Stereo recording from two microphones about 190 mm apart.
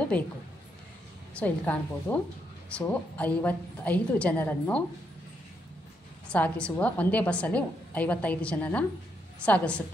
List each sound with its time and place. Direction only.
0.1 s a woman's voice: 5° left (ahead or behind)
1.3 s a woman's voice: 10° left (ahead or behind)
6.3 s a woman's voice: 5° left (ahead or behind)